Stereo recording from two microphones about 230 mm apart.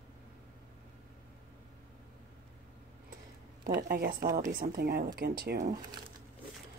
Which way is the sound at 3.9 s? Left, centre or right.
Right.